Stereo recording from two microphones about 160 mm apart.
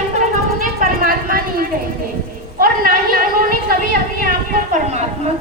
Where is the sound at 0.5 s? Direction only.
60° right (ahead or behind).